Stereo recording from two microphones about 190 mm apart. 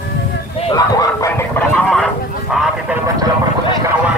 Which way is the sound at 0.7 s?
20° left (ahead or behind).